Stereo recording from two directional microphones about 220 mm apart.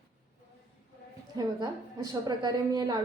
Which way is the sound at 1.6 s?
15° right (ahead or behind).